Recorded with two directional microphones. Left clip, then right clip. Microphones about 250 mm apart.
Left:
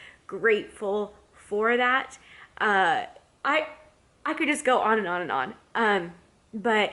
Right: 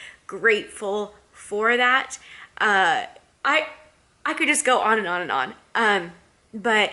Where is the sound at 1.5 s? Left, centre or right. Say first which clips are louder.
Right 4 dB; centre.